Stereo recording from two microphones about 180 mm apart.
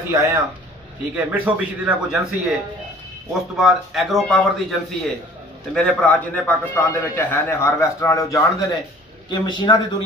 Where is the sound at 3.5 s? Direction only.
Centre (ahead or behind).